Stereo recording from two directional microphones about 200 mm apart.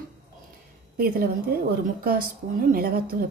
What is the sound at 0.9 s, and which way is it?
Speech, 50° right (ahead or behind).